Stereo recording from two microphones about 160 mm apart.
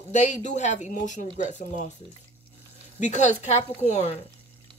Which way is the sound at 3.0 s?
50° left (ahead or behind).